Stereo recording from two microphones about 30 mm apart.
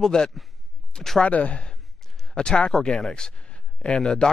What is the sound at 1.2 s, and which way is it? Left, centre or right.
Speech, left.